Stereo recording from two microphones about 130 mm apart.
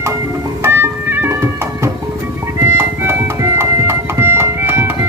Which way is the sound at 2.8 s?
20° right (ahead or behind).